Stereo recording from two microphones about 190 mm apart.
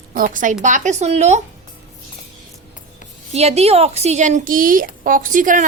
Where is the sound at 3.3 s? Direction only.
35° right (ahead or behind).